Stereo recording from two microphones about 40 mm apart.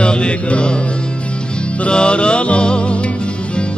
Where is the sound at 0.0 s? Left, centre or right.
Left.